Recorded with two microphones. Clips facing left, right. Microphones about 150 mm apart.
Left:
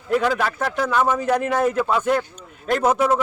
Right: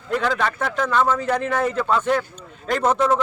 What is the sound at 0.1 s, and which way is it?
A man's voice, 5° left (ahead or behind).